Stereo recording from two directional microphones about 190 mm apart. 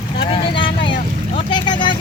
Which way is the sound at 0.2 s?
30° left (ahead or behind).